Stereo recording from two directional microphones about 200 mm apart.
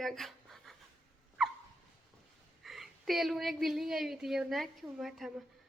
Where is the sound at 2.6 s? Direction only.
Centre (ahead or behind).